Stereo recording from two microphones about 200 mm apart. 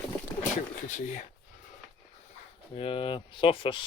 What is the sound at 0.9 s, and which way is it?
Speech, 40° left (ahead or behind).